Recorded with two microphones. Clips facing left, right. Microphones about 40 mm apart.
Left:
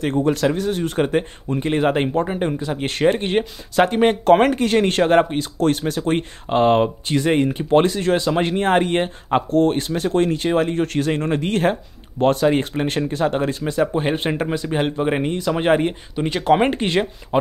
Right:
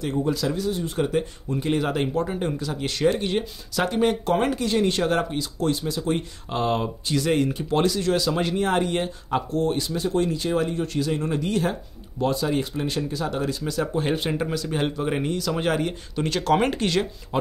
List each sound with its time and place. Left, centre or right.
0.2 s speech: left